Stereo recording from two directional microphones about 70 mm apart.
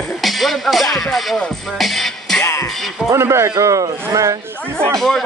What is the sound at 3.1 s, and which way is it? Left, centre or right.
Speech, right.